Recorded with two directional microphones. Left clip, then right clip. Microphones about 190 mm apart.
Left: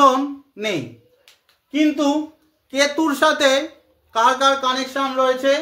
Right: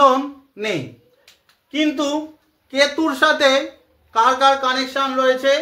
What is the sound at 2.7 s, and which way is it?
Speech, 20° left (ahead or behind).